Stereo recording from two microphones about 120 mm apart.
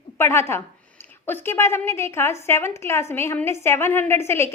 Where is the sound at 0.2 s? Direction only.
20° left (ahead or behind).